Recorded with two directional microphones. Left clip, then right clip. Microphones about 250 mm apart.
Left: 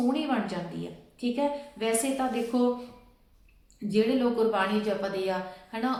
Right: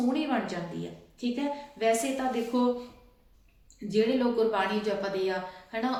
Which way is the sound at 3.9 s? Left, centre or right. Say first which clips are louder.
Even; centre.